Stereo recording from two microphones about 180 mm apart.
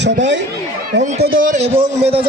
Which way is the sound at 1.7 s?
30° right (ahead or behind).